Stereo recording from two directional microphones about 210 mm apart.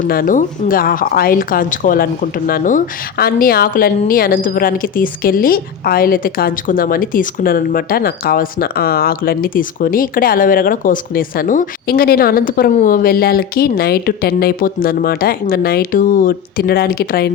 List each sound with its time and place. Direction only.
0.1 s a woman's voice: 40° left (ahead or behind)